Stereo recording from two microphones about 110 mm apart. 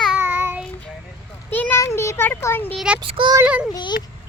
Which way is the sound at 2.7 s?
5° right (ahead or behind).